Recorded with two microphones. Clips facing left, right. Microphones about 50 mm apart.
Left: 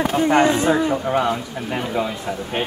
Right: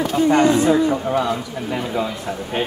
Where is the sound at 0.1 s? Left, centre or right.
Left.